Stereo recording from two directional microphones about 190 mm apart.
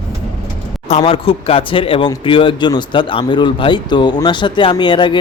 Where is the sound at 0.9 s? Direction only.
35° left (ahead or behind).